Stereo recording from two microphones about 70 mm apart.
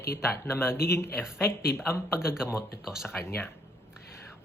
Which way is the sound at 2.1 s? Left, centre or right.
Centre.